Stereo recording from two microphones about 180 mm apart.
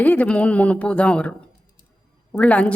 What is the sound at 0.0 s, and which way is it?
A woman's voice, 10° left (ahead or behind).